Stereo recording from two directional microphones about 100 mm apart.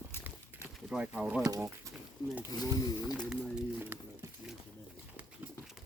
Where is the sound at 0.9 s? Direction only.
10° right (ahead or behind).